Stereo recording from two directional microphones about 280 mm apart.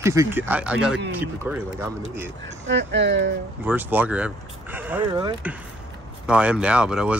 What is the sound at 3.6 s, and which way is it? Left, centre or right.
Speech, centre.